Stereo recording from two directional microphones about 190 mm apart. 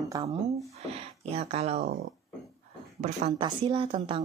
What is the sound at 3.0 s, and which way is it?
Speech, 30° right (ahead or behind).